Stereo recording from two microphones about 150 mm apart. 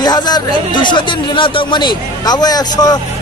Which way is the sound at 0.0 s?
30° left (ahead or behind).